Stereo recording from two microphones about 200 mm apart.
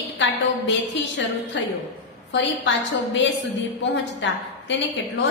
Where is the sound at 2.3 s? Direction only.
65° left (ahead or behind).